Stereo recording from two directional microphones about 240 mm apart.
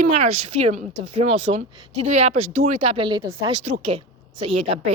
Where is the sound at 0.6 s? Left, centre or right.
Right.